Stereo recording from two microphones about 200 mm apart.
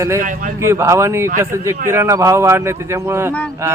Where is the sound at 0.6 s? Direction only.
15° right (ahead or behind).